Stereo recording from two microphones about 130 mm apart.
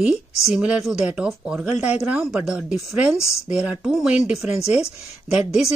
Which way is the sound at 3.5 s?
10° right (ahead or behind).